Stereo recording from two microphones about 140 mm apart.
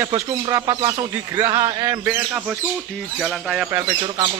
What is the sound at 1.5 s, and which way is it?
Speech, 30° right (ahead or behind).